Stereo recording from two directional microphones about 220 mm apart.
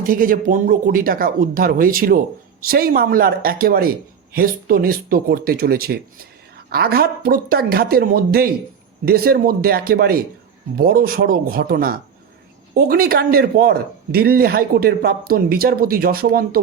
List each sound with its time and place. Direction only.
0.0 s speech: 40° right (ahead or behind)